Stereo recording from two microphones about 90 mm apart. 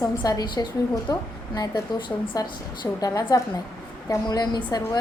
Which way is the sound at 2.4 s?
45° left (ahead or behind).